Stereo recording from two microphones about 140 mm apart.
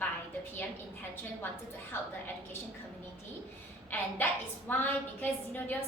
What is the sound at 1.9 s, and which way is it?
Speech, 15° left (ahead or behind).